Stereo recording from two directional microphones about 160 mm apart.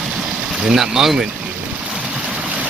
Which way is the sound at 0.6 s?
5° right (ahead or behind).